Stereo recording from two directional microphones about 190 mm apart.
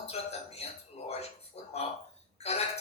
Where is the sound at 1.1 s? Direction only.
35° left (ahead or behind).